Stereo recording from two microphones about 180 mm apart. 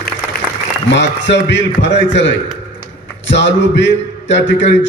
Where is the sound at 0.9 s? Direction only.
75° left (ahead or behind).